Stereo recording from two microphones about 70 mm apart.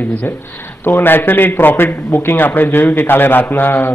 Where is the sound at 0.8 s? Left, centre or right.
Left.